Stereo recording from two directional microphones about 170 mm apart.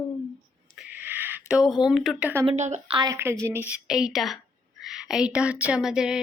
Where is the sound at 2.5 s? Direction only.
40° right (ahead or behind).